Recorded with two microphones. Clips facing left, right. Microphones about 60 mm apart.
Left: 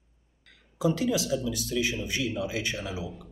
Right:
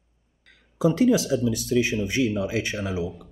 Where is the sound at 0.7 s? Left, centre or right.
Right.